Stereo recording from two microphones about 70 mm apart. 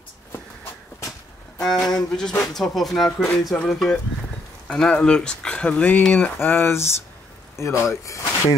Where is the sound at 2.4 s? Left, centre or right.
Centre; by 6.0 s left.